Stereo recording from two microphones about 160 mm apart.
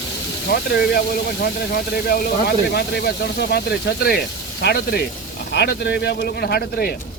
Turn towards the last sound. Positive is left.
turn(degrees=80)